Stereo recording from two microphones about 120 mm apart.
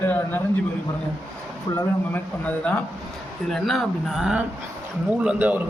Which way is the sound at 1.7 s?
20° left (ahead or behind).